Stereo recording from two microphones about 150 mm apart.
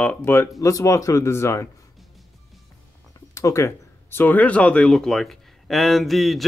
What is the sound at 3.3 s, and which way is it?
Speech, 20° left (ahead or behind).